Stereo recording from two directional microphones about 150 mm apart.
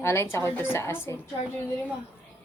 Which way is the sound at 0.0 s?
20° left (ahead or behind).